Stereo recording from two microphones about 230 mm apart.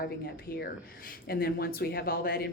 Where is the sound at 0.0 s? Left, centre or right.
Left.